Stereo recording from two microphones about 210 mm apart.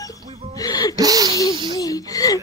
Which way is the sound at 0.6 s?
15° left (ahead or behind).